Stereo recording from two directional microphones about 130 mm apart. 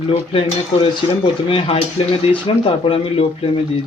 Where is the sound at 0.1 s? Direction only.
50° left (ahead or behind).